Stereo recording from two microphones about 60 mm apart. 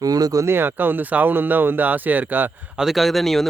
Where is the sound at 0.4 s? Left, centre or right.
Right.